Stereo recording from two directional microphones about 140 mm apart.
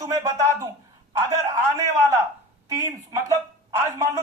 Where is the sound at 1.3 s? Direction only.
20° right (ahead or behind).